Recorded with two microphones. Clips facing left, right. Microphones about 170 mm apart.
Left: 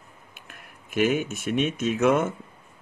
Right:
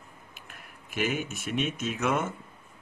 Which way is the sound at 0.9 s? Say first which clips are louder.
Left 7 dB; 50° left (ahead or behind).